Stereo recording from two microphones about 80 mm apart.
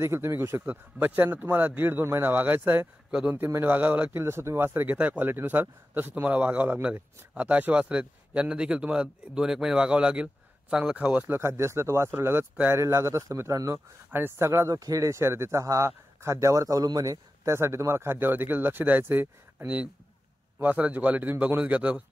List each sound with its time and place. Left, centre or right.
0.0 s a man's voice: right
3.1 s speech: centre
3.3 s speech: right
3.7 s a man's voice: centre
4.2 s a man's voice: right; by 11.2 s centre
11.2 s speech: right
14.1 s speech: right
17.6 s a man's voice: right; by 22.0 s centre